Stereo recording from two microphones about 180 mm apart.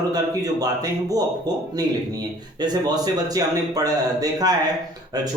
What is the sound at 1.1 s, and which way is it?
Speech, 20° right (ahead or behind).